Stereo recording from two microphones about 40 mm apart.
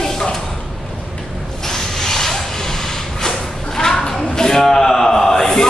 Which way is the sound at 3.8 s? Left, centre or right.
Centre.